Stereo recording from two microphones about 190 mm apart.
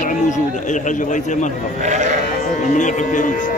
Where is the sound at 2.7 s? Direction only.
40° left (ahead or behind).